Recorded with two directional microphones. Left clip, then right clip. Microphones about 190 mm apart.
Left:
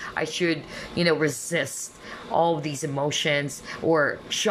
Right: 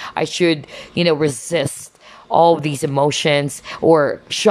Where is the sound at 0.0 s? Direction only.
25° right (ahead or behind).